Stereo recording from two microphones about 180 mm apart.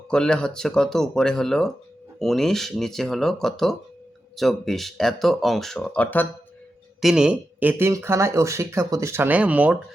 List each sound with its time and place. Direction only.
0.1 s speech: 5° left (ahead or behind)
7.0 s speech: 5° right (ahead or behind)